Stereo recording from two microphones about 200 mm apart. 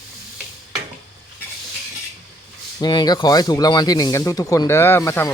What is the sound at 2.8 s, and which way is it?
Speech, 20° left (ahead or behind).